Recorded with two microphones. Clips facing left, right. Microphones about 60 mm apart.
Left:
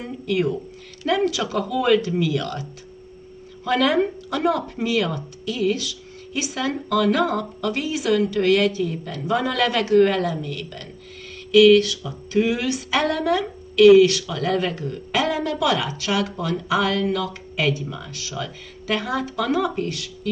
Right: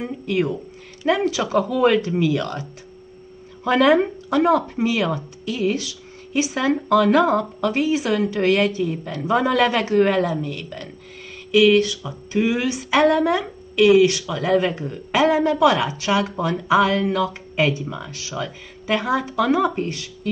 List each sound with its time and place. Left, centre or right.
0.0 s a woman's voice: right